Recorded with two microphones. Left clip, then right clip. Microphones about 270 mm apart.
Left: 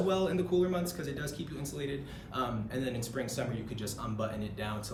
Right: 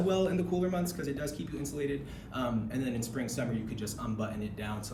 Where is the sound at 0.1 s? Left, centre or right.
Centre.